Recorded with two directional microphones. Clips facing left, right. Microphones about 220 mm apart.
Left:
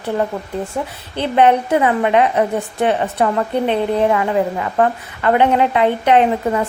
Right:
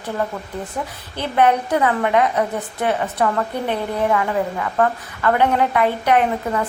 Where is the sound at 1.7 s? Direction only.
20° left (ahead or behind).